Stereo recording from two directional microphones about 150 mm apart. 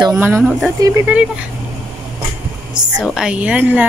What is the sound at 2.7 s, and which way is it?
A woman's voice, 5° right (ahead or behind).